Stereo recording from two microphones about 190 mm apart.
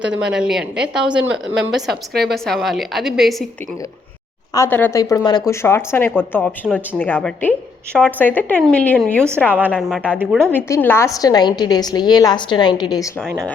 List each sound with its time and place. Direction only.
0.0 s a woman's voice: 5° right (ahead or behind)
4.5 s speech: 10° left (ahead or behind)
9.5 s a woman's voice: 10° right (ahead or behind)
10.5 s a woman's voice: 10° left (ahead or behind)